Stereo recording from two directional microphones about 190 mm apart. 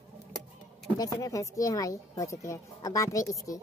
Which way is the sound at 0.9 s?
20° left (ahead or behind).